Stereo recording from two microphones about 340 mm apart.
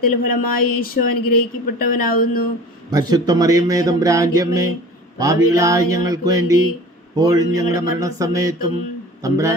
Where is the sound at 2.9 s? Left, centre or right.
Centre.